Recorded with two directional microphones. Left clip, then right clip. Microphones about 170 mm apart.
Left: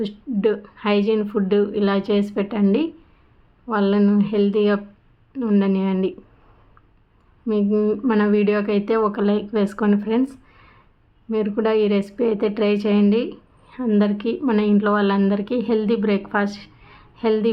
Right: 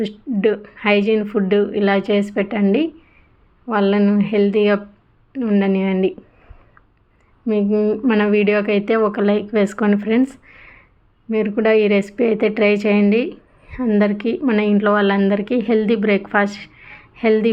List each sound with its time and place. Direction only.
0.0 s a woman's voice: 15° right (ahead or behind)
7.4 s a woman's voice: 10° right (ahead or behind)